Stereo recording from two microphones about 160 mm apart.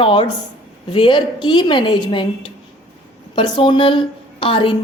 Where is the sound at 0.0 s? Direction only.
35° left (ahead or behind).